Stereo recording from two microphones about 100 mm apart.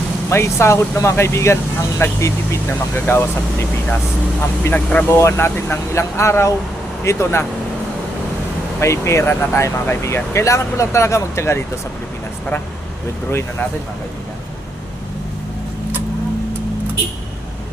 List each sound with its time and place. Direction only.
0.3 s speech: 25° left (ahead or behind)
5.0 s speech: 25° left (ahead or behind)
8.8 s speech: 30° left (ahead or behind)